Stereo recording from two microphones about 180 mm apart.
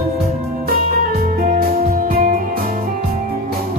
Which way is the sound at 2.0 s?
55° right (ahead or behind).